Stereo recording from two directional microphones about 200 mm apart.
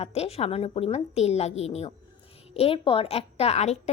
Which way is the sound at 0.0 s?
30° left (ahead or behind).